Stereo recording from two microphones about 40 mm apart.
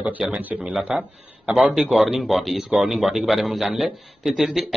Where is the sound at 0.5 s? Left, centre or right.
Right.